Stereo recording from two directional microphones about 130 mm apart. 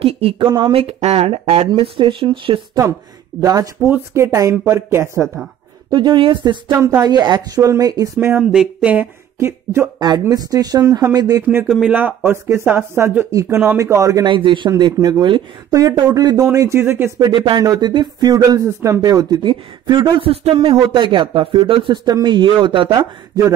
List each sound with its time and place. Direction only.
0.0 s a sound: 45° right (ahead or behind)
0.6 s speech: 45° right (ahead or behind)
1.7 s speech: 40° right (ahead or behind)
3.3 s speech: 25° right (ahead or behind)
5.9 s speech: 35° right (ahead or behind)
6.7 s speech: 20° right (ahead or behind)
7.1 s speech: 35° right (ahead or behind)
8.3 s speech: 5° right (ahead or behind)
9.9 s speech: 35° right (ahead or behind)
11.4 s speech: 10° right (ahead or behind)
14.2 s speech: 40° right (ahead or behind); by 17.1 s 20° right (ahead or behind)
17.2 s speech: 35° right (ahead or behind)